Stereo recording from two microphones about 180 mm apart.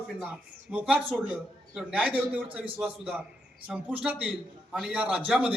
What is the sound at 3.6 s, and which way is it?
Speech, 5° right (ahead or behind).